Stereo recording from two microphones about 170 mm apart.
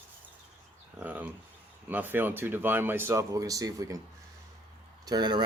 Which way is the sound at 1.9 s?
10° right (ahead or behind).